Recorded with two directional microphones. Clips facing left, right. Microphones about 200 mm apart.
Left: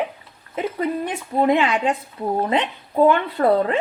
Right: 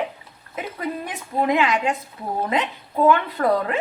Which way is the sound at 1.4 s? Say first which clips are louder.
Left 2 dB; 30° left (ahead or behind).